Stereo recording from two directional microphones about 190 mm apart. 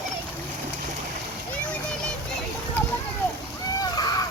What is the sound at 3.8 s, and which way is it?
Splash, 20° left (ahead or behind).